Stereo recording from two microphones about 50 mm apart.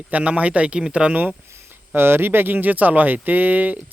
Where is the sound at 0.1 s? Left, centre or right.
Right.